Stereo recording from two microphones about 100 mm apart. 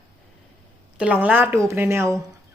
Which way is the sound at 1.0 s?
15° right (ahead or behind).